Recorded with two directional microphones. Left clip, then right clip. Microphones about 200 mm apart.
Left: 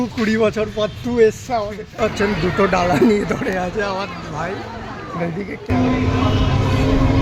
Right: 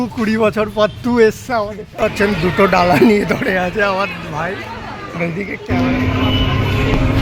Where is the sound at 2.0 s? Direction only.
5° right (ahead or behind).